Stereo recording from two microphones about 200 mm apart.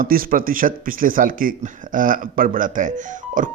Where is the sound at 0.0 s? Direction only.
45° right (ahead or behind).